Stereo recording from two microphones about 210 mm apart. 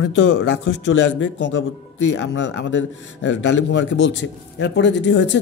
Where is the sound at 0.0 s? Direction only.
60° left (ahead or behind).